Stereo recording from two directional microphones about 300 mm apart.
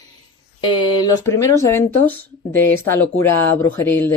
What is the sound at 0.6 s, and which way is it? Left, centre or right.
Speech, centre.